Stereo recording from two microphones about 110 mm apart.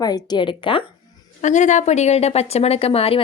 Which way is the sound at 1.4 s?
90° left.